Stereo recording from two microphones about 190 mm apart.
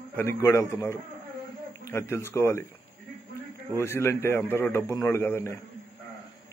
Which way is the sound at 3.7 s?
15° left (ahead or behind).